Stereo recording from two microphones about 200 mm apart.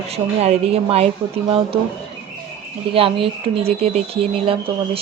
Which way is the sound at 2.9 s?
30° right (ahead or behind).